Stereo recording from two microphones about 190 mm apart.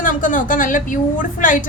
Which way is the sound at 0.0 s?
45° left (ahead or behind).